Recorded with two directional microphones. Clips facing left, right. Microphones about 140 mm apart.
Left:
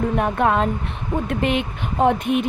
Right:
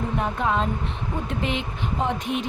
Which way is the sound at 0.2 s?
60° left (ahead or behind).